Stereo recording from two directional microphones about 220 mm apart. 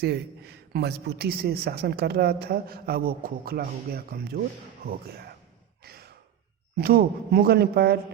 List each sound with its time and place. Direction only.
0.7 s speech: 50° right (ahead or behind)
5.8 s sigh: 45° right (ahead or behind)
6.7 s speech: 45° right (ahead or behind)